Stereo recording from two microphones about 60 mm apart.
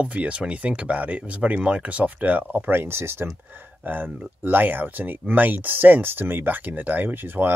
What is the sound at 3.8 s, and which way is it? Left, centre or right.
Speech, right.